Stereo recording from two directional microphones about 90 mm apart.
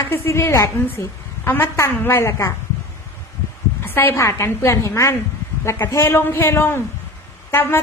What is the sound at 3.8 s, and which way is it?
A woman's voice, 25° left (ahead or behind).